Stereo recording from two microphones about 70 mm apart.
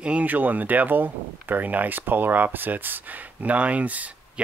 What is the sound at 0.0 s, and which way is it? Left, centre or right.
Speech, right.